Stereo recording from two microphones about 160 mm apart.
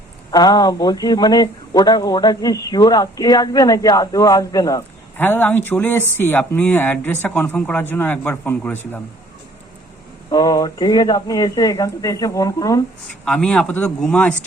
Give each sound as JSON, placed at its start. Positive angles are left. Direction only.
{"t": 0.3, "sound": "speech", "side_deg": 25}
{"t": 10.2, "sound": "speech", "side_deg": 25}
{"t": 13.2, "sound": "speech", "side_deg": 5}